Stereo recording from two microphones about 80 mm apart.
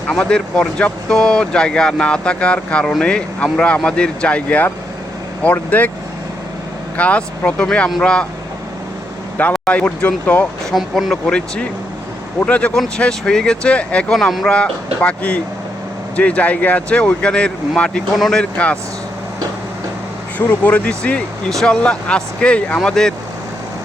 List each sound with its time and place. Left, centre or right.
0.1 s speech: centre
6.9 s speech: centre
9.6 s speech: centre
10.7 s speech: centre
20.5 s speech: centre